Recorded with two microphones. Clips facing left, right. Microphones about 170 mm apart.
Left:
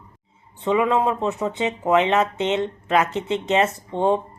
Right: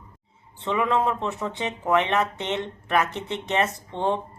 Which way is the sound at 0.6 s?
15° left (ahead or behind).